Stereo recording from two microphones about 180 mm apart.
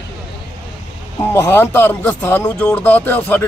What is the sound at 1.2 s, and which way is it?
Speech, 15° left (ahead or behind).